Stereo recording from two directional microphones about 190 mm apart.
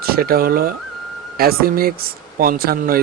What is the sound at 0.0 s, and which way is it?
Speech, 50° right (ahead or behind).